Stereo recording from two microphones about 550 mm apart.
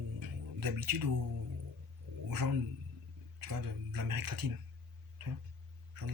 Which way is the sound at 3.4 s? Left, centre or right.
Right.